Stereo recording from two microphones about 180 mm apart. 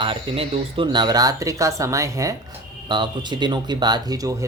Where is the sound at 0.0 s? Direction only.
30° right (ahead or behind).